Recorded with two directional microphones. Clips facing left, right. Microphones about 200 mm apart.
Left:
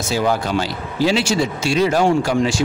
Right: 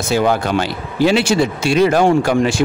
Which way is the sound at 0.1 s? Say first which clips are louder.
Right 3 dB; 60° right (ahead or behind).